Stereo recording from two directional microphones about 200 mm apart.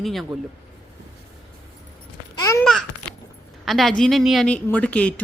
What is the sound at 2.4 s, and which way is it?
Babbling, 15° left (ahead or behind).